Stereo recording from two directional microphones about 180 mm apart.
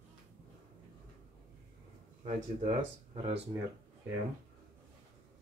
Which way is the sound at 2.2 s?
35° right (ahead or behind).